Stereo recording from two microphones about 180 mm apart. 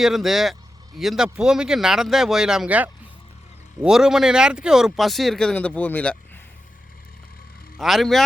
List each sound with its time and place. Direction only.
0.0 s speech: centre (ahead or behind)
7.8 s speech: centre (ahead or behind)